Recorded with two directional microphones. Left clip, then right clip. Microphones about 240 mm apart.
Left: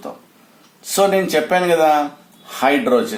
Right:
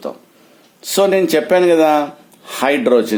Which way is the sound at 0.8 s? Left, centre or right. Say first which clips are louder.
Right 2 dB; right.